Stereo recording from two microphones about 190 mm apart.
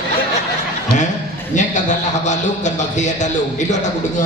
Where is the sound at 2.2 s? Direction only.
40° left (ahead or behind).